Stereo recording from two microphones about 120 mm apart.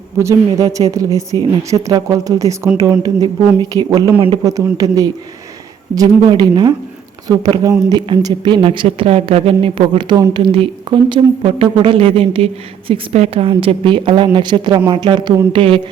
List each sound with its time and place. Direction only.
0.2 s speech: 25° right (ahead or behind)
15.5 s speech: 50° right (ahead or behind)